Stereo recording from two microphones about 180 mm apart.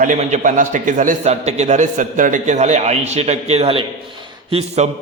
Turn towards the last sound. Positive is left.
turn(degrees=-35)  # may be behind; listen again after turning